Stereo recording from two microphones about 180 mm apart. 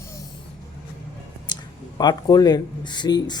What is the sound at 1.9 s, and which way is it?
Speech, 20° left (ahead or behind).